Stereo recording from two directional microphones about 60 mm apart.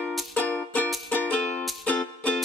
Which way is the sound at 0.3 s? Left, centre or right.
Left.